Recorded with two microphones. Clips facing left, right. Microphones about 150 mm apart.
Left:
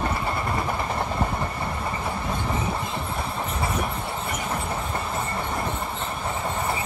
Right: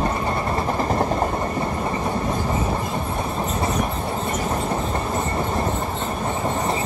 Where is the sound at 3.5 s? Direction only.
30° right (ahead or behind).